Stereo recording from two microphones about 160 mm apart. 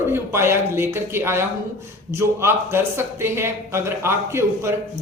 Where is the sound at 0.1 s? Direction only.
15° right (ahead or behind).